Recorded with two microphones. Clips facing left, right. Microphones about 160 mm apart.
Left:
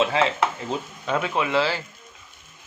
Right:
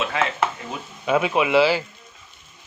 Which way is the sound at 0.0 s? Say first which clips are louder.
Left 3 dB; 30° left (ahead or behind).